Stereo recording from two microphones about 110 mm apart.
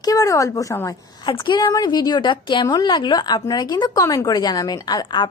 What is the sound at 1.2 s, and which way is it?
Speech, 50° left (ahead or behind).